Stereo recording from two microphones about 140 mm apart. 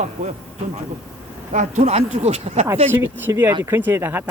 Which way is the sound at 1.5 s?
60° right (ahead or behind).